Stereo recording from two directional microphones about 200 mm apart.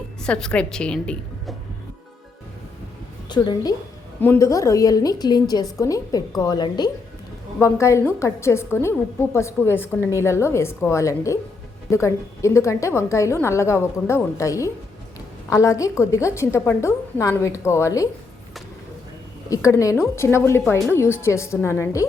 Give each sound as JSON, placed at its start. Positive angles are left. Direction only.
{"t": 0.2, "sound": "a woman's voice", "side_deg": 5}
{"t": 3.2, "sound": "a woman's voice", "side_deg": 20}
{"t": 19.5, "sound": "a woman's voice", "side_deg": 15}